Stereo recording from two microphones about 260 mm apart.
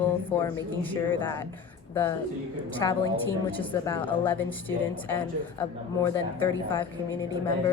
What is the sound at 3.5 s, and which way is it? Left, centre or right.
Speech, centre.